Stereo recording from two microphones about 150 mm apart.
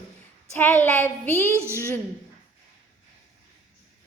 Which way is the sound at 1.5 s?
15° right (ahead or behind).